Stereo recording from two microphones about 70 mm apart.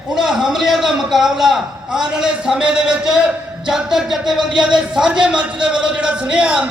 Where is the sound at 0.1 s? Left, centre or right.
Centre.